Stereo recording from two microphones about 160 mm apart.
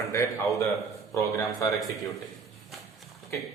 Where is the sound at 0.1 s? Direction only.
15° left (ahead or behind).